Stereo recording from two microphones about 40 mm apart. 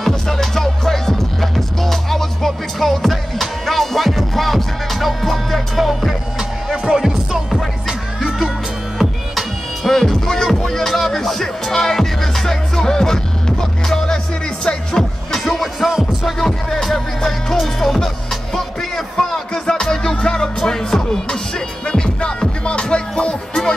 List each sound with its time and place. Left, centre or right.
0.3 s music: centre
8.9 s music: centre; by 15.0 s left
15.3 s music: centre
15.9 s music: centre
16.3 s music: centre